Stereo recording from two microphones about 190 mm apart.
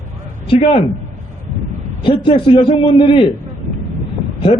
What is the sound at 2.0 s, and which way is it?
A man's voice, 25° left (ahead or behind).